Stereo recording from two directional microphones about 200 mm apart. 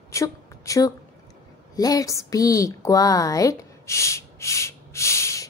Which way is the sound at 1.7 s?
20° left (ahead or behind).